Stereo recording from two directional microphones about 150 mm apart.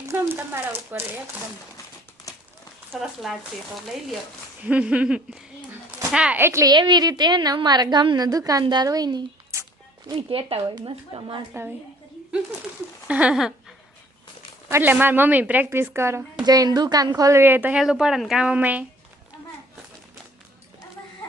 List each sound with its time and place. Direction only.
0.1 s a woman's voice: 15° right (ahead or behind)
3.0 s speech: centre (ahead or behind)
4.6 s a woman's voice: 10° right (ahead or behind); by 9.6 s 25° right (ahead or behind)
10.1 s speech: 35° right (ahead or behind)
13.1 s a woman's voice: 10° right (ahead or behind)